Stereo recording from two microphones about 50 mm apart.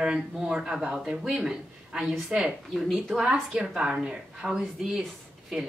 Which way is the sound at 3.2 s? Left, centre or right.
Centre.